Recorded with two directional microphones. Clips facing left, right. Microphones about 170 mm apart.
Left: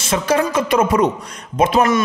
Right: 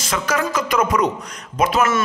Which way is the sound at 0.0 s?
25° left (ahead or behind).